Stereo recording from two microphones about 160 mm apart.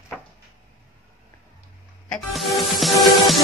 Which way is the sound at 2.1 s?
Centre (ahead or behind).